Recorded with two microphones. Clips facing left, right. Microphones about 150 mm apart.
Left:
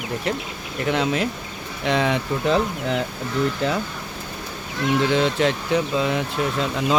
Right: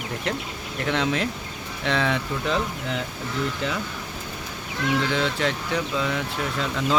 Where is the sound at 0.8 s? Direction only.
10° left (ahead or behind).